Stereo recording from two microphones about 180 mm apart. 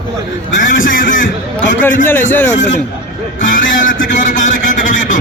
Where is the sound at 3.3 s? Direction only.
45° left (ahead or behind).